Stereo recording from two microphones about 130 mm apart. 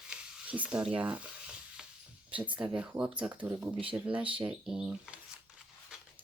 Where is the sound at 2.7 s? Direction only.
10° right (ahead or behind).